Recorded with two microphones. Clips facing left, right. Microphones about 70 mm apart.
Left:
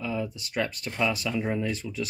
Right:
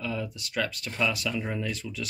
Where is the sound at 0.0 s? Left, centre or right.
Centre.